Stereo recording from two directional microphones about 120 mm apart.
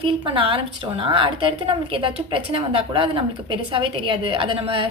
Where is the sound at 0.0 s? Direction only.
50° right (ahead or behind).